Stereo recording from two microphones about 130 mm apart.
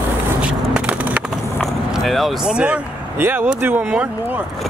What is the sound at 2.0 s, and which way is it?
Speech, centre (ahead or behind).